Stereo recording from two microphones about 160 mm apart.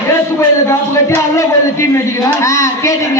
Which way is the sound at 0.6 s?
15° left (ahead or behind).